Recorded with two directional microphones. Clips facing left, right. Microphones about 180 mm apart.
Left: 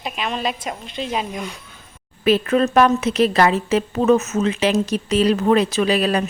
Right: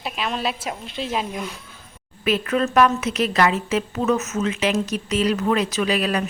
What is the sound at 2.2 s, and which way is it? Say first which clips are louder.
Speech: left 5 dB; 30° left (ahead or behind).